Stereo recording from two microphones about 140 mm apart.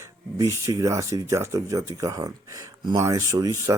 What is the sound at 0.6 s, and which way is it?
Speech, 20° right (ahead or behind).